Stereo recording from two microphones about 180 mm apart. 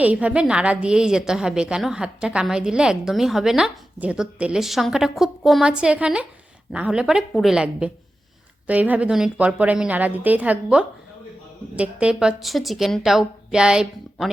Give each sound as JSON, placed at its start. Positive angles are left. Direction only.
{"t": 0.0, "sound": "a woman's voice", "side_deg": -10}